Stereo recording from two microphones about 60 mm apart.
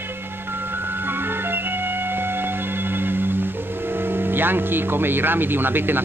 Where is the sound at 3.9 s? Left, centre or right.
Right.